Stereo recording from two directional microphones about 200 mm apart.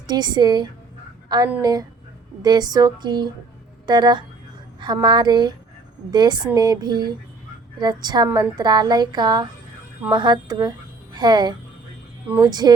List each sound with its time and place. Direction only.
0.1 s a woman's voice: 20° right (ahead or behind)